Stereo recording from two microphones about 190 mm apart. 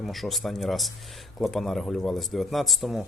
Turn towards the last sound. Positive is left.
turn(degrees=0)  # may be behind; listen again after turning